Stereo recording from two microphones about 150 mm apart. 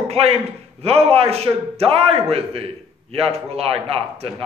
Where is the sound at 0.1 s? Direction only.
40° right (ahead or behind).